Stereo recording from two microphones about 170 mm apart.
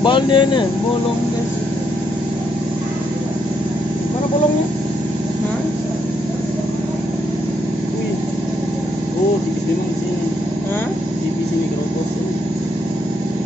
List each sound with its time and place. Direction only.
0.0 s speech: 30° left (ahead or behind)